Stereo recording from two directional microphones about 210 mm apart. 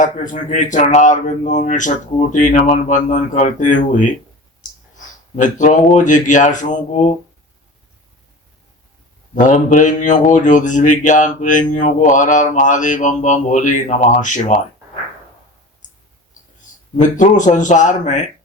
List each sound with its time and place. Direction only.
0.0 s speech: 35° left (ahead or behind)
4.6 s a sound: 35° left (ahead or behind)
5.4 s speech: 35° left (ahead or behind)
9.3 s speech: 35° left (ahead or behind)
17.0 s speech: 35° left (ahead or behind)